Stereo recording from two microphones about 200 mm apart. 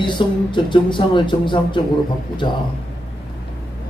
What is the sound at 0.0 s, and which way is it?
A man's voice, 25° left (ahead or behind).